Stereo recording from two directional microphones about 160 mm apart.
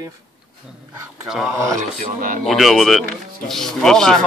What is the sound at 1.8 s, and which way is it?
Speech, 55° right (ahead or behind).